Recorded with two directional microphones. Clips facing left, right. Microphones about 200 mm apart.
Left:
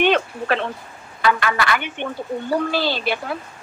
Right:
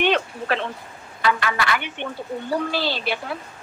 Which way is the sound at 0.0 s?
50° left (ahead or behind).